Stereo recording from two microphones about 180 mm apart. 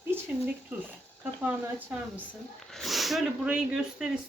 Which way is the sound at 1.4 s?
10° right (ahead or behind).